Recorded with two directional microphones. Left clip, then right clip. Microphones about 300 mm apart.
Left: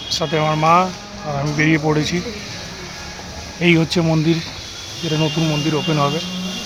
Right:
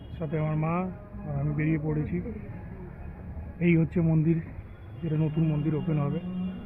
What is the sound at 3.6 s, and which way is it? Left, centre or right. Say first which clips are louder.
Speech: left 11 dB; centre.